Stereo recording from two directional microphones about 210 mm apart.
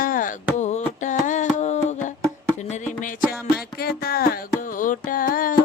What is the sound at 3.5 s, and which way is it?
Music, 45° left (ahead or behind).